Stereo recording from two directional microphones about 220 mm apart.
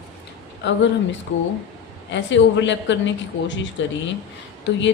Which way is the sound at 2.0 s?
55° left (ahead or behind).